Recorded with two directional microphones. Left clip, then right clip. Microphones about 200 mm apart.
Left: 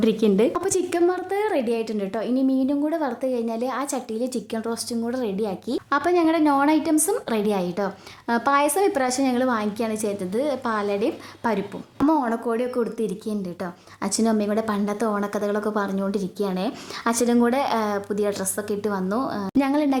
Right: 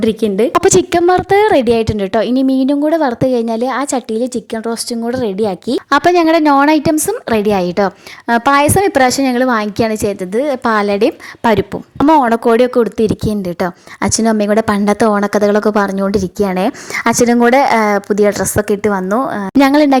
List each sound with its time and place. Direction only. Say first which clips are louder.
0.0 s a woman's voice: right 6 dB; 25° right (ahead or behind)
0.5 s a woman's voice: right 13 dB; 45° right (ahead or behind)